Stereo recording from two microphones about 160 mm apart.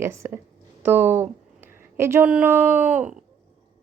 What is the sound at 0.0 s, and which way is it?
A woman's voice, 15° right (ahead or behind).